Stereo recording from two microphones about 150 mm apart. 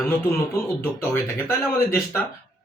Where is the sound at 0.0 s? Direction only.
15° left (ahead or behind).